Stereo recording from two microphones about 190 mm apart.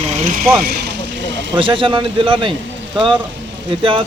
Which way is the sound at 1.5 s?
25° right (ahead or behind).